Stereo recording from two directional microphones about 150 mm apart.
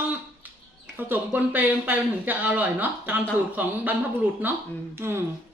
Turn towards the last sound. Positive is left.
turn(degrees=-15)  # may be behind; listen again after turning